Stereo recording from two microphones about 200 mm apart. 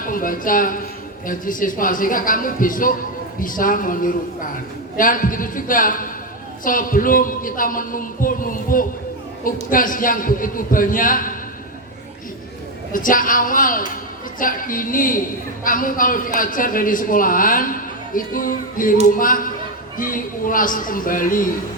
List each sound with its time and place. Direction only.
0.0 s a woman's voice: 45° left (ahead or behind)
12.9 s a man's voice: 40° left (ahead or behind)